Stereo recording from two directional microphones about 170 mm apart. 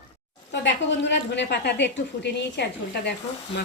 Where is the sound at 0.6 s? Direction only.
90° left.